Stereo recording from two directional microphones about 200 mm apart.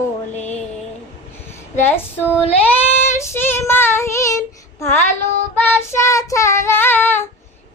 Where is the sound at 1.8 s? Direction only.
10° left (ahead or behind).